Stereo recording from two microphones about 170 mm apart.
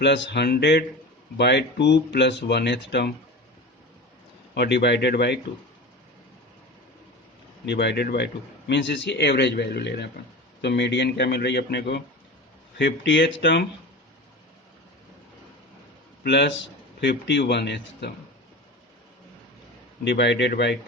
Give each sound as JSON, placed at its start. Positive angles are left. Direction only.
{"t": 0.0, "sound": "speech", "side_deg": 90}
{"t": 4.5, "sound": "speech", "side_deg": 80}
{"t": 7.6, "sound": "speech", "side_deg": 85}
{"t": 16.2, "sound": "a man's voice", "side_deg": 80}
{"t": 20.1, "sound": "speech", "side_deg": 85}